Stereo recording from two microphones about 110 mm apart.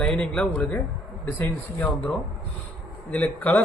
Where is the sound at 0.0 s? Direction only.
10° left (ahead or behind).